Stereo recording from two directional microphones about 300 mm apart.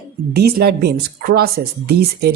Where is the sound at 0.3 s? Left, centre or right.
Right.